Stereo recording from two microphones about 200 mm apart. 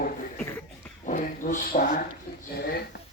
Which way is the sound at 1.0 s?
40° left (ahead or behind).